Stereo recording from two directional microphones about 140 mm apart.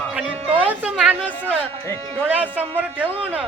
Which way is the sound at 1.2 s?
15° left (ahead or behind).